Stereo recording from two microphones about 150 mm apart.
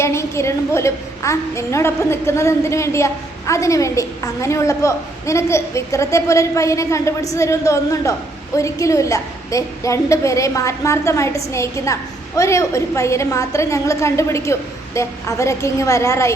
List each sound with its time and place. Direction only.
0.0 s a woman's voice: 20° left (ahead or behind)